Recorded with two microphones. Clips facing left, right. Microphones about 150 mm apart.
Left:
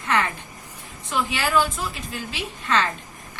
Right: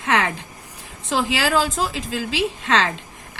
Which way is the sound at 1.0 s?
90° right.